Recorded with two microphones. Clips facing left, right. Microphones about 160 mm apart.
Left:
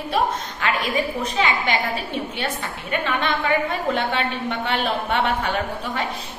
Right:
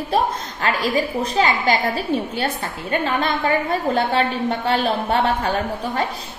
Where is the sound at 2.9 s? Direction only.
35° right (ahead or behind).